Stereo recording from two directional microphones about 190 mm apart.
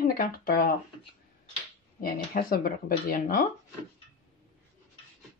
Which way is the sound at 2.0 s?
50° left (ahead or behind).